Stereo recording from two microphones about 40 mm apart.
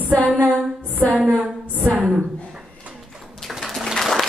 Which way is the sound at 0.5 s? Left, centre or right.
Right.